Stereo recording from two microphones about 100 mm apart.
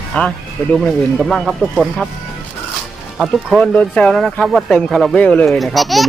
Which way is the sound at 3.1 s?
Centre (ahead or behind).